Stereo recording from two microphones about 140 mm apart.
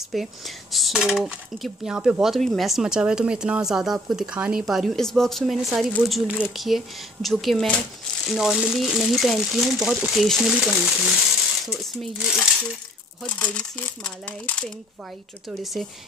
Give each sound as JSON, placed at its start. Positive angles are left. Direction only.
{"t": 0.1, "sound": "speech", "side_deg": 0}
{"t": 15.6, "sound": "speech", "side_deg": 0}